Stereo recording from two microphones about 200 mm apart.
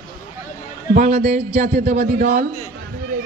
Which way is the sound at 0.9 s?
35° right (ahead or behind).